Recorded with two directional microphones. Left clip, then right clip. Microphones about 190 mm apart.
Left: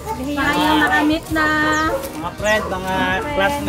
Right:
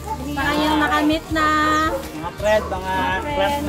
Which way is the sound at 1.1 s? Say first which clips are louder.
Left 1 dB; 50° right (ahead or behind).